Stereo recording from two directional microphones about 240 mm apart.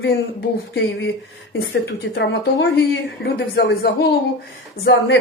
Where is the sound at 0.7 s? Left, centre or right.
Left.